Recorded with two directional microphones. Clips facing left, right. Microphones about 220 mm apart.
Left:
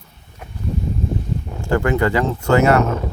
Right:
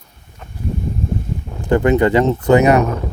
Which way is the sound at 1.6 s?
20° right (ahead or behind).